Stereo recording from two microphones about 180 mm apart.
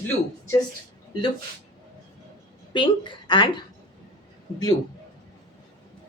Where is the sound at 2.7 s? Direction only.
25° left (ahead or behind).